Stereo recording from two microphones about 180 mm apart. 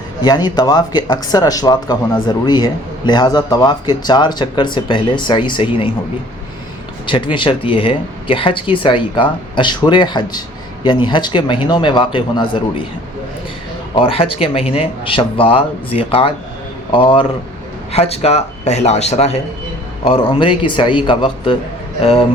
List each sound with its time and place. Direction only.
0.2 s speech: 25° left (ahead or behind)
7.1 s speech: 30° left (ahead or behind)
13.9 s speech: 30° left (ahead or behind)